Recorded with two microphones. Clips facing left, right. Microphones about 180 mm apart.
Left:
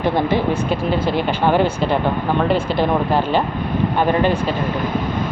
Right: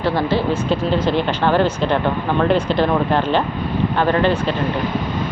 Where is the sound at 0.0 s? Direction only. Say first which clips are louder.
Left 1 dB; 15° left (ahead or behind).